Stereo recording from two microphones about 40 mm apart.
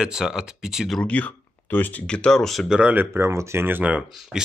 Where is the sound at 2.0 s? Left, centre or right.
Left.